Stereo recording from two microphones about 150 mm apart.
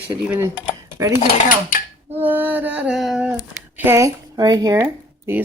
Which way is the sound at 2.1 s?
10° right (ahead or behind).